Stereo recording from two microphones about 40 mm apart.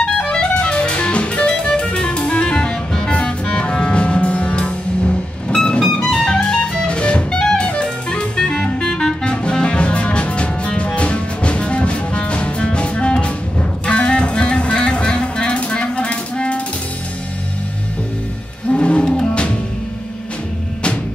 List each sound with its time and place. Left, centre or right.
0.0 s music: left
18.7 s roaring cats: left